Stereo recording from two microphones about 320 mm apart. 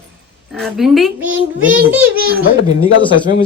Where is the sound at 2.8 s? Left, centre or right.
Left.